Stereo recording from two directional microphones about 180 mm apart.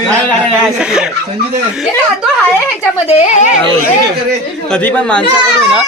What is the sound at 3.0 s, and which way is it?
Speech, 40° left (ahead or behind).